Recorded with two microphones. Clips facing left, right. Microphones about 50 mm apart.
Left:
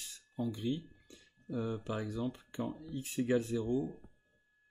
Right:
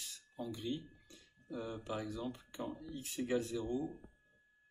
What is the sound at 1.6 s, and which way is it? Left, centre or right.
Speech, left.